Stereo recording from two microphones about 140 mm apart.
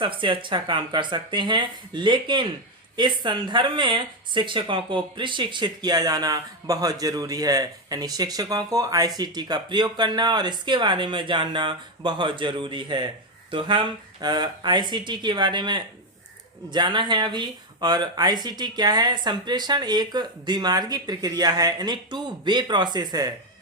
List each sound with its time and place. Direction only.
0.0 s speech: 35° right (ahead or behind)